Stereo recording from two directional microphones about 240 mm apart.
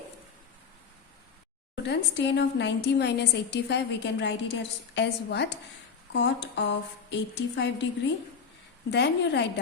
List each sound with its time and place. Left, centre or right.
1.7 s a woman's voice: left
8.9 s a woman's voice: left